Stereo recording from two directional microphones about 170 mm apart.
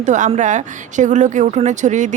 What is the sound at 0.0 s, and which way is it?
Speech, 45° right (ahead or behind).